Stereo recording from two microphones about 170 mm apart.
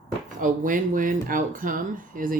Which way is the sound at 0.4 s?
50° right (ahead or behind).